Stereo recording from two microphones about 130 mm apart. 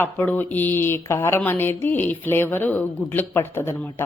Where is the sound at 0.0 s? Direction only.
15° left (ahead or behind).